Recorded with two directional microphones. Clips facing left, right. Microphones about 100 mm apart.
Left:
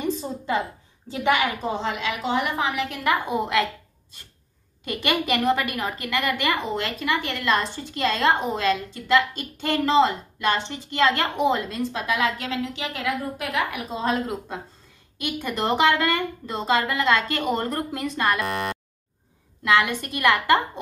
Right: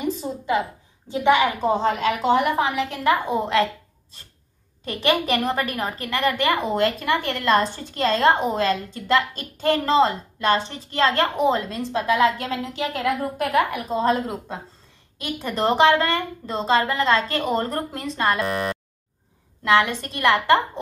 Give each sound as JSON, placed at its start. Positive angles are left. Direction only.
{"t": 1.0, "sound": "a woman's voice", "side_deg": -20}
{"t": 1.7, "sound": "a woman's voice", "side_deg": -40}
{"t": 4.8, "sound": "a woman's voice", "side_deg": -35}
{"t": 19.6, "sound": "a woman's voice", "side_deg": -30}